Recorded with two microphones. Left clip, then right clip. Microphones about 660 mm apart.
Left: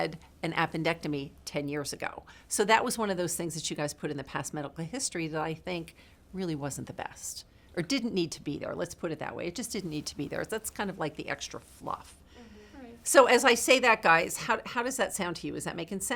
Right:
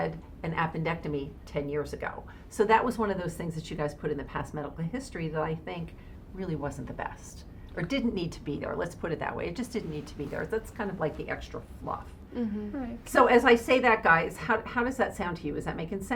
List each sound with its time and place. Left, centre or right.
0.0 s a woman's voice: left
13.1 s a woman's voice: left